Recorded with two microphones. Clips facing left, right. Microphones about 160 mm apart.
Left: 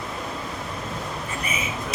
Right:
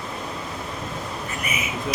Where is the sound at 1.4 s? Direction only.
30° left (ahead or behind).